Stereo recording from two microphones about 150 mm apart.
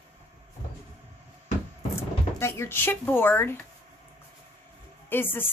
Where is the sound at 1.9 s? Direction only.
15° left (ahead or behind).